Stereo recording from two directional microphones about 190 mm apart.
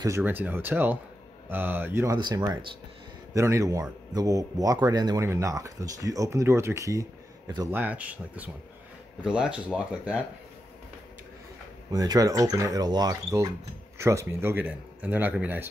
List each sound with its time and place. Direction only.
0.0 s speech: 10° right (ahead or behind)
7.7 s speech: 10° right (ahead or behind)
11.9 s speech: 20° right (ahead or behind)